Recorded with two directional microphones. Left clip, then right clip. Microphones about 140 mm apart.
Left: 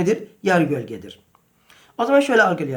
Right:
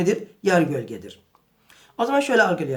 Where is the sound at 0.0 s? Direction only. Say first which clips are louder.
Left 1 dB; 25° left (ahead or behind).